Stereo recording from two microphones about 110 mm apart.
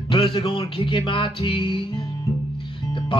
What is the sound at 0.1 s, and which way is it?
Music, 55° left (ahead or behind).